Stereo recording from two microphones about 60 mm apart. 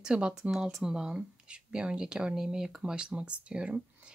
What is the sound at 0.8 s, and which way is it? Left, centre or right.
Speech, centre.